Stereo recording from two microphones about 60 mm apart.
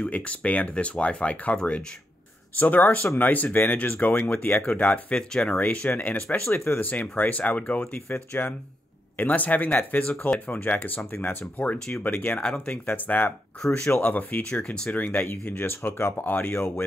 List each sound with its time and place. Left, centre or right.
0.0 s speech: left
12.4 s speech: centre
14.5 s speech: centre